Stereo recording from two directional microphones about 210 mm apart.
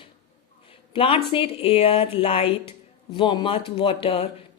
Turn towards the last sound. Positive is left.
turn(degrees=30)  # may be behind; listen again after turning